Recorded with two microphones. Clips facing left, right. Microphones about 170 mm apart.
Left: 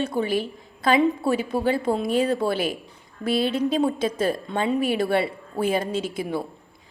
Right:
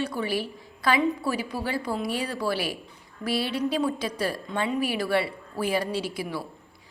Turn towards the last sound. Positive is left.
turn(degrees=20)  # may be behind; listen again after turning